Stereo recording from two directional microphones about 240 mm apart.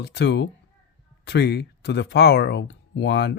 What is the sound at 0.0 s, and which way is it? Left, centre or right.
Speech, left.